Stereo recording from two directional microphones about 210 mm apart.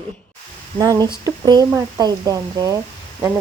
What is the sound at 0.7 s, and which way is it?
Speech, 20° right (ahead or behind).